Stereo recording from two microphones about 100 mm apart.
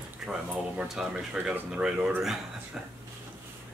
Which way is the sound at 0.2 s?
5° right (ahead or behind).